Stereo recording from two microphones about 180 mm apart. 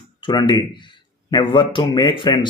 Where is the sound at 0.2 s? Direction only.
25° left (ahead or behind).